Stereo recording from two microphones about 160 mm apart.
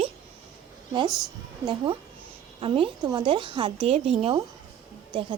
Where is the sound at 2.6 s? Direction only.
35° right (ahead or behind).